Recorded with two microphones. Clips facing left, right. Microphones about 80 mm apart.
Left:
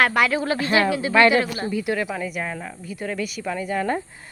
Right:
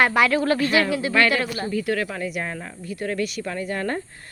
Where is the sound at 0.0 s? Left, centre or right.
Centre.